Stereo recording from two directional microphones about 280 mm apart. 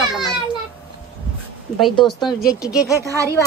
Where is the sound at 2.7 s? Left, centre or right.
Centre.